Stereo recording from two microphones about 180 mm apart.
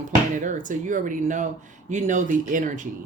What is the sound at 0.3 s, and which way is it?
Speech, 45° right (ahead or behind).